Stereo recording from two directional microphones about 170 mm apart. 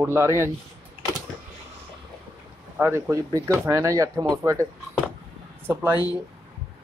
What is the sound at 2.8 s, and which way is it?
Speech, 10° right (ahead or behind).